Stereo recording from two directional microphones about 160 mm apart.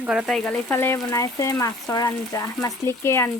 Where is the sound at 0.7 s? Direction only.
15° left (ahead or behind).